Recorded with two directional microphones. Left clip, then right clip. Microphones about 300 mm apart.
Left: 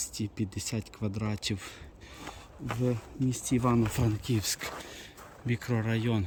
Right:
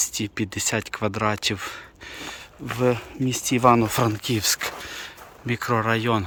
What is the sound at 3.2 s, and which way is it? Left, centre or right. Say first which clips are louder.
Speech: right 7 dB; centre.